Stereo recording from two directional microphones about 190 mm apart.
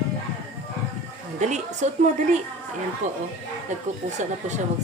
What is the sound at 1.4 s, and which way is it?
Speech, 40° right (ahead or behind).